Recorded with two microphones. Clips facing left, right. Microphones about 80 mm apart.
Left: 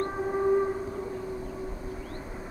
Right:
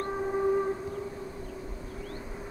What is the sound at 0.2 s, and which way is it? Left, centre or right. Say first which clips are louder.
Train: left 2 dB; centre.